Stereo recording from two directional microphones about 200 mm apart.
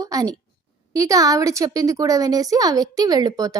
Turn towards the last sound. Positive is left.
turn(degrees=-20)  # may be behind; listen again after turning